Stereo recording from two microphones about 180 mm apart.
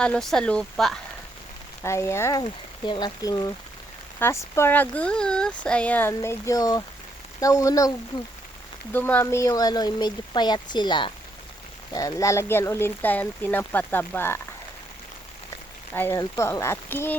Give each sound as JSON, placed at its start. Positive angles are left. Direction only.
{"t": 0.0, "sound": "speech", "side_deg": 5}
{"t": 1.8, "sound": "speech", "side_deg": 15}
{"t": 2.4, "sound": "speech", "side_deg": 25}
{"t": 16.0, "sound": "speech", "side_deg": 15}